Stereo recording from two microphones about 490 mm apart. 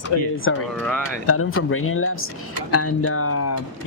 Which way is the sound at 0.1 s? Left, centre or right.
Left.